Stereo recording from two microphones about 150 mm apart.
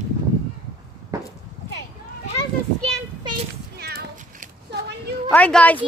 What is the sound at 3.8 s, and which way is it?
Cat, 90° right.